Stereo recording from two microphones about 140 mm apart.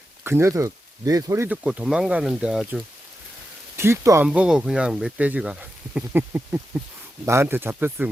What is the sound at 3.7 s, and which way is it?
Speech, 20° right (ahead or behind).